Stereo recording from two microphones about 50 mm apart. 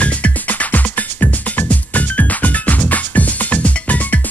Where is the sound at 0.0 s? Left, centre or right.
Left.